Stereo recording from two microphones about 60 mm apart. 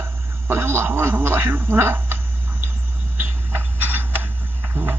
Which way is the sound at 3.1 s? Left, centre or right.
Right.